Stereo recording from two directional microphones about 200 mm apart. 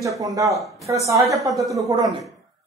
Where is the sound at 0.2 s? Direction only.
15° right (ahead or behind).